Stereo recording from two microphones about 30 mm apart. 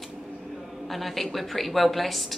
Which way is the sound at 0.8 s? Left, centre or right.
Centre.